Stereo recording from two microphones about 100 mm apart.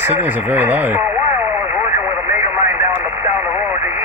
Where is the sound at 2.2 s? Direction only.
25° right (ahead or behind).